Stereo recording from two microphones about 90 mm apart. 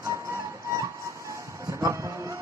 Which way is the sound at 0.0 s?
35° right (ahead or behind).